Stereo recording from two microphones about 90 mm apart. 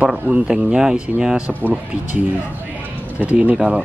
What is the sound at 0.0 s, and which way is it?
Speech, 10° right (ahead or behind).